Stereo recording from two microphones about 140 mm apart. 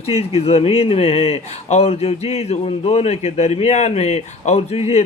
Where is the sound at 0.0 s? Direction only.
45° left (ahead or behind).